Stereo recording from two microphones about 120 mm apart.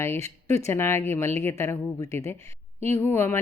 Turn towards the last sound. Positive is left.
turn(degrees=20)  # may be behind; listen again after turning